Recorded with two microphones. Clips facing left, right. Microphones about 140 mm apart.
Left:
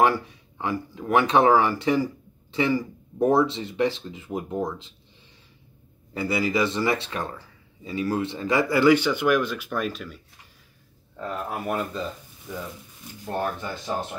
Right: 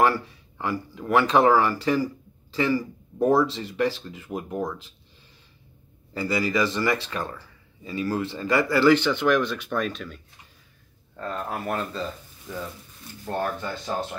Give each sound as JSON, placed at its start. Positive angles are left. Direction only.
{"t": 0.0, "sound": "speech", "side_deg": 20}
{"t": 6.1, "sound": "speech", "side_deg": 25}